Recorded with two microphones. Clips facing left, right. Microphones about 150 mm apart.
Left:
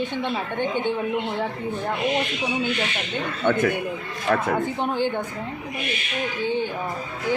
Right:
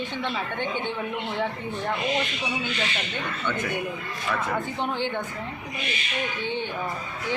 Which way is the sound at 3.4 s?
55° left (ahead or behind).